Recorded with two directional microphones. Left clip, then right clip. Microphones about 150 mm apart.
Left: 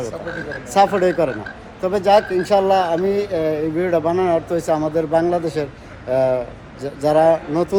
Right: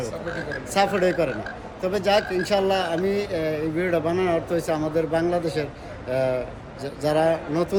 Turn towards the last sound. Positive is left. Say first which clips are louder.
# left 6 dB
turn(degrees=15)  # may be behind; listen again after turning